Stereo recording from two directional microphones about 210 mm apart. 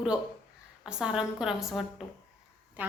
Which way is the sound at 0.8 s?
5° right (ahead or behind).